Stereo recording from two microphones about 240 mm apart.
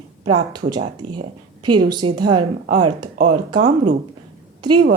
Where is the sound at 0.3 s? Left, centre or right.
Right.